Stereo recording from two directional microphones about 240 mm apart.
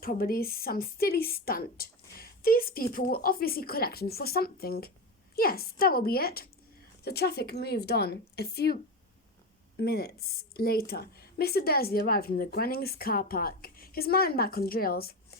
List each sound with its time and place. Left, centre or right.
0.0 s a woman's voice: left